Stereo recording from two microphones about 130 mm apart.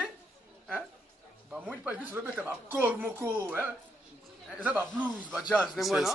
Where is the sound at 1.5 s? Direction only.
10° right (ahead or behind).